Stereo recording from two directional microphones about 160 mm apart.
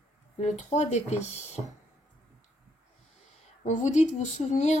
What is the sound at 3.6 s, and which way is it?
Speech, 45° left (ahead or behind).